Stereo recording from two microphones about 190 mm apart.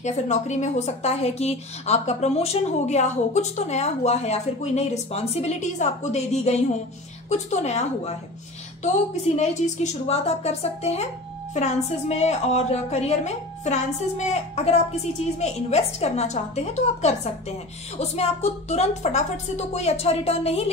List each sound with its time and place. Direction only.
0.0 s speech: 40° left (ahead or behind)